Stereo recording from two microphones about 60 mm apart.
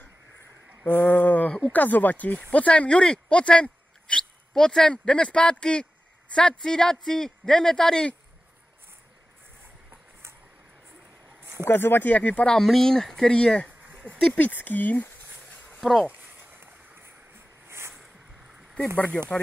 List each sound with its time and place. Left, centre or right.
0.8 s a sound: left
1.7 s a man's voice: left; by 8.1 s centre
11.6 s speech: left
12.4 s a man's voice: centre
14.0 s speech: left
15.8 s speech: centre
16.1 s a sound: right
17.6 s a sound: right
19.2 s a man's voice: centre